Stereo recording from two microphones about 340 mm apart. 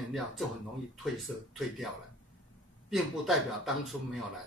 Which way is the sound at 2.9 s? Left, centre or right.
Centre.